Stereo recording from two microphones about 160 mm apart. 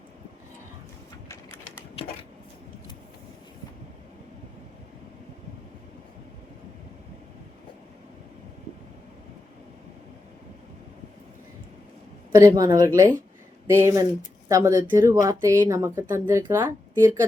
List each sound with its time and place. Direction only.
12.5 s speech: 20° right (ahead or behind)